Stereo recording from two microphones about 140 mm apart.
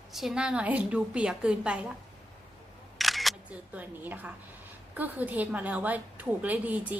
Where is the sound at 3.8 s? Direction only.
10° right (ahead or behind).